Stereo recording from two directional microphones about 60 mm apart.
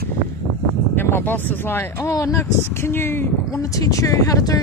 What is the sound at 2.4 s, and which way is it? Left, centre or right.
Speech, left.